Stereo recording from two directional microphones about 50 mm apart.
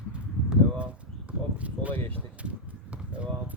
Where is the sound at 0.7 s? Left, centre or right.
Right.